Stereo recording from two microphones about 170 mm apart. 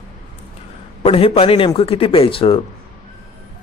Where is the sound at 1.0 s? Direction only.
35° left (ahead or behind).